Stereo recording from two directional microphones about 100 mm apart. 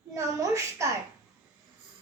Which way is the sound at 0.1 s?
30° right (ahead or behind).